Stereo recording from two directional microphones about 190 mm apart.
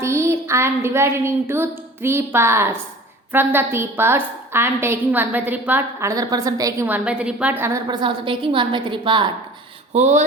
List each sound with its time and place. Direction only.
0.0 s a sound: 15° right (ahead or behind)
3.3 s a woman's voice: 10° right (ahead or behind)
9.9 s speech: 40° right (ahead or behind)